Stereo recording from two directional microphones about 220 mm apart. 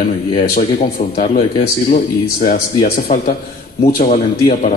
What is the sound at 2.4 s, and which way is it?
Speech, 35° left (ahead or behind).